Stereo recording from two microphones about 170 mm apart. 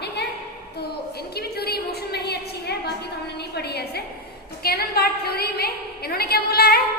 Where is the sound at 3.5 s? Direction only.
70° left (ahead or behind).